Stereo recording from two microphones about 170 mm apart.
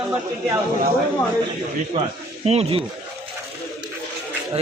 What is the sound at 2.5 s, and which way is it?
Speech, 35° right (ahead or behind).